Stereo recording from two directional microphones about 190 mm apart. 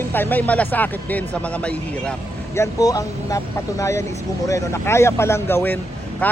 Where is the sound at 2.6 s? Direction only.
20° left (ahead or behind).